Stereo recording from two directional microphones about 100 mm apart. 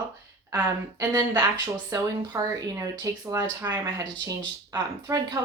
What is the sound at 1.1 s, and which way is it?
Speech, 35° right (ahead or behind).